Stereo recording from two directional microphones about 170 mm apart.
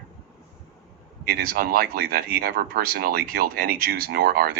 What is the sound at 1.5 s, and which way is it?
Speech, 60° right (ahead or behind).